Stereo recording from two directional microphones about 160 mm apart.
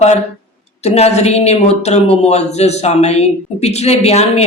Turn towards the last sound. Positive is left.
turn(degrees=40)  # may be behind; listen again after turning